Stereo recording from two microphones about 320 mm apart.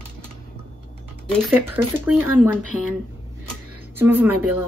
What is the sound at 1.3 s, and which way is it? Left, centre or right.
Speech, centre.